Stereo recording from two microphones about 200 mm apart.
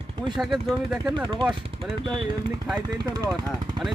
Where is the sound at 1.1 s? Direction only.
20° right (ahead or behind).